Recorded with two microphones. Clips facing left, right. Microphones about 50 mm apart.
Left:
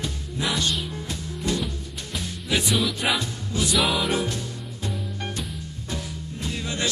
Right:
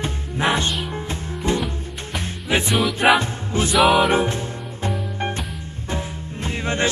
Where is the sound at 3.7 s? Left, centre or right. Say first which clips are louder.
Right 9 dB; centre.